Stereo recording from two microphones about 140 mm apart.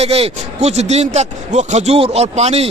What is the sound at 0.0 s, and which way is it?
A man's voice, 45° right (ahead or behind).